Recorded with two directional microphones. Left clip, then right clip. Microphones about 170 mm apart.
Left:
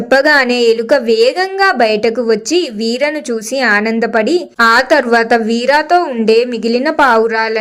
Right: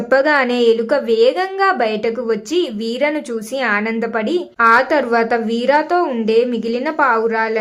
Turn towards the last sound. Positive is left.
turn(degrees=30)  # may be behind; listen again after turning